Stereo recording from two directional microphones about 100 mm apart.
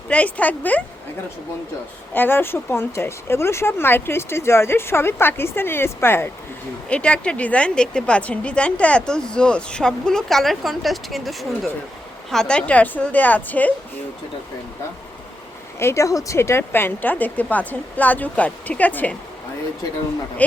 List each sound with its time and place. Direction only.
0.1 s a woman's voice: 15° left (ahead or behind)
2.1 s speech: 20° left (ahead or behind)
6.9 s a woman's voice: 10° left (ahead or behind)
15.8 s a woman's voice: 30° left (ahead or behind)